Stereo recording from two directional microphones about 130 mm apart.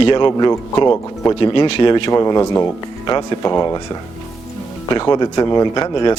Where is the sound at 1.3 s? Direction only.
40° left (ahead or behind).